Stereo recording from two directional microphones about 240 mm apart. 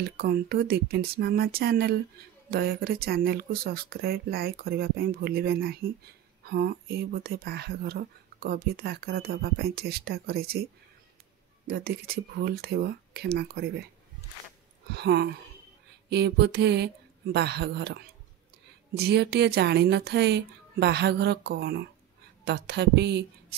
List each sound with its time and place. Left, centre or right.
0.0 s speech: right
11.6 s speech: right
14.9 s speech: right